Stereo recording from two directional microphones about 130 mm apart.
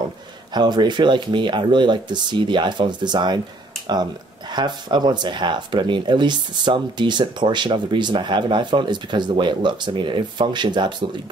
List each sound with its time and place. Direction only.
0.6 s speech: 35° right (ahead or behind)